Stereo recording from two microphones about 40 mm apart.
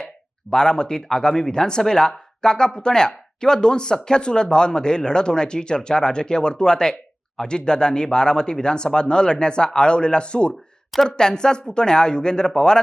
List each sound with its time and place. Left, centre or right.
0.5 s speech: centre